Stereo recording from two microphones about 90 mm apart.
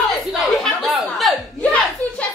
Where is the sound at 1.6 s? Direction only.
15° left (ahead or behind).